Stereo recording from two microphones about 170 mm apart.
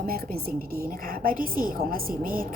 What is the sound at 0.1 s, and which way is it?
A woman's voice, 60° right (ahead or behind).